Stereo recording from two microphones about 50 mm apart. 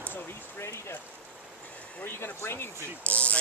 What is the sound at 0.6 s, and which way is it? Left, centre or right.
Speech, left.